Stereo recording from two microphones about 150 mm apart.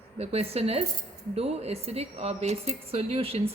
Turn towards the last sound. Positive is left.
turn(degrees=-40)  # may be behind; listen again after turning